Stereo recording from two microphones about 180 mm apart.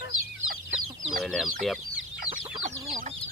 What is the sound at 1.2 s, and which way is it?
Speech, centre (ahead or behind).